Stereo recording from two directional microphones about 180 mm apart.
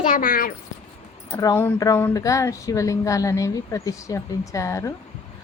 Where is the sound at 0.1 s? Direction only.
50° left (ahead or behind).